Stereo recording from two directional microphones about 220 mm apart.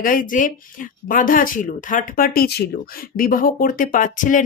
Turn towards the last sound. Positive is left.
turn(degrees=35)  # may be behind; listen again after turning